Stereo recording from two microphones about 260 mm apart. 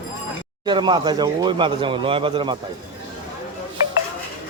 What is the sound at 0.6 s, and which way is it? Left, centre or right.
Speech, centre.